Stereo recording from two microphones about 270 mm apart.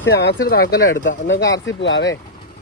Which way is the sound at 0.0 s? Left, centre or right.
Left.